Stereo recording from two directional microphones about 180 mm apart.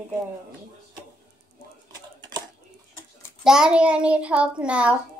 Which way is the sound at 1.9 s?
25° right (ahead or behind).